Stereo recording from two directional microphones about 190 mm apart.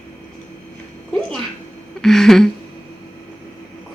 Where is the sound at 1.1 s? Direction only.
5° left (ahead or behind).